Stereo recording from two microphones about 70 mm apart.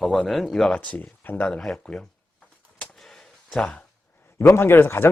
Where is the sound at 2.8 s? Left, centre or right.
Centre.